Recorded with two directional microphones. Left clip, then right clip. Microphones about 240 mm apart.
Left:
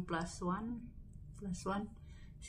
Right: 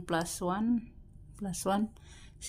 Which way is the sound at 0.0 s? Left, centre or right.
Right.